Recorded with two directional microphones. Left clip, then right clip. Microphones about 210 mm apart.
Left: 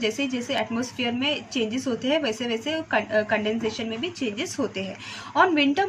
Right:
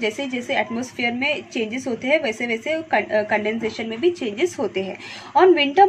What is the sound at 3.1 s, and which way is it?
A woman's voice, 15° right (ahead or behind).